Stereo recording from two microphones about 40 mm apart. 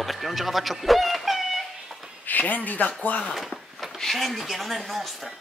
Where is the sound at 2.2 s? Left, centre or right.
Left.